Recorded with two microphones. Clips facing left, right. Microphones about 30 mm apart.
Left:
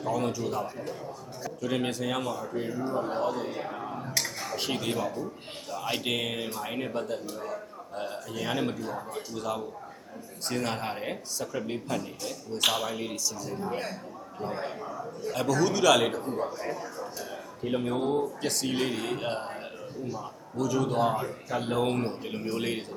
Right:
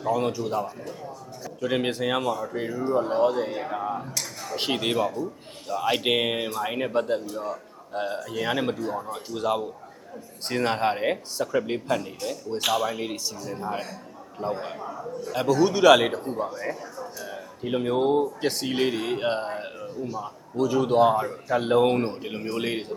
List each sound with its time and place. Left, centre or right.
0.0 s a man's voice: centre
1.6 s a man's voice: right
4.5 s a man's voice: right
14.6 s a man's voice: centre
17.7 s a man's voice: right